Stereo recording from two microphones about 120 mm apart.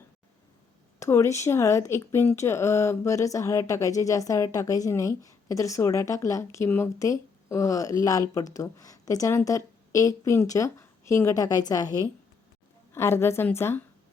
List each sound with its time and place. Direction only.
0.9 s speech: 25° left (ahead or behind)